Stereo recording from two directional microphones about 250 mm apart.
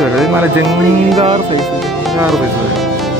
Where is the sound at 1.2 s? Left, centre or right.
Right.